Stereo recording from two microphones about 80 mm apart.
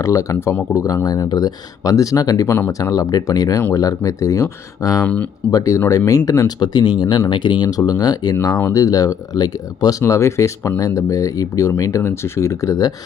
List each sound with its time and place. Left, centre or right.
0.0 s speech: left
2.5 s speech: left
2.9 s speech: left
5.0 s speech: centre
5.5 s speech: left
6.6 s speech: left
7.7 s speech: left
10.0 s speech: left